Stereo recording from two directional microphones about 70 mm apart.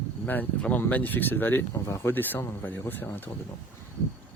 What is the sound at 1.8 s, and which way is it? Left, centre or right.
Speech, left.